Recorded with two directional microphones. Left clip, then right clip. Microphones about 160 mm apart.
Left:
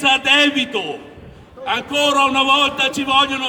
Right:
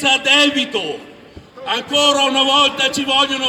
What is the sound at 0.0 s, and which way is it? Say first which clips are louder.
A man's voice: right 1 dB; 15° right (ahead or behind).